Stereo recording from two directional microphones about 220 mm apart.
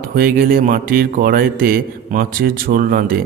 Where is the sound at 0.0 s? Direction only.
45° right (ahead or behind).